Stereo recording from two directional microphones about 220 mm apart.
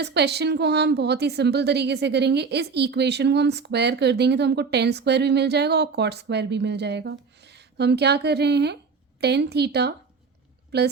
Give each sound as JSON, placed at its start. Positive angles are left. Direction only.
{"t": 0.0, "sound": "a woman's voice", "side_deg": -50}